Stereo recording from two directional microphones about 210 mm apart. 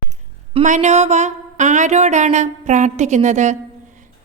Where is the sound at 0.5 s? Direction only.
35° right (ahead or behind).